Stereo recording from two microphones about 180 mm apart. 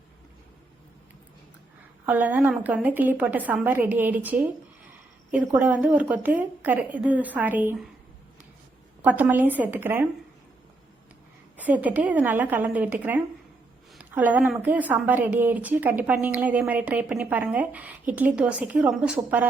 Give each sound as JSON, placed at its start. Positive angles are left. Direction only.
{"t": 2.0, "sound": "a woman's voice", "side_deg": -10}
{"t": 5.5, "sound": "a woman's voice", "side_deg": -10}
{"t": 9.0, "sound": "a woman's voice", "side_deg": -10}
{"t": 11.5, "sound": "a woman's voice", "side_deg": -10}